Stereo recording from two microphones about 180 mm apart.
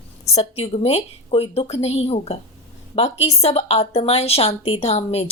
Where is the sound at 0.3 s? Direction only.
35° left (ahead or behind).